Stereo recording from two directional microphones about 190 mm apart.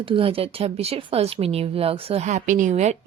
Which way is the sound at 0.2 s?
30° right (ahead or behind).